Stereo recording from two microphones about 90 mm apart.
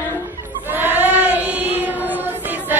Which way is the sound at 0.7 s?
20° right (ahead or behind).